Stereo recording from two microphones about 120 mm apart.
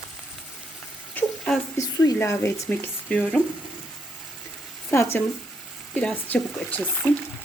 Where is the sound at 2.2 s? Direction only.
20° left (ahead or behind).